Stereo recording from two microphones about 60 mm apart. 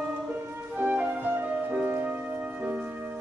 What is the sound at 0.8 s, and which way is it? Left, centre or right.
Flute, right.